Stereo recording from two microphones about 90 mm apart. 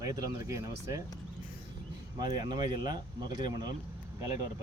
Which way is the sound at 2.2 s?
50° right (ahead or behind).